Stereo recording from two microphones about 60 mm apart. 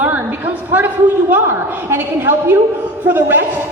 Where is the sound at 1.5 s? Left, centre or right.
Right.